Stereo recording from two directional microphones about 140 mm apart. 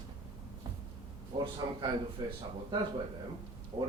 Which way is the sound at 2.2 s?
30° right (ahead or behind).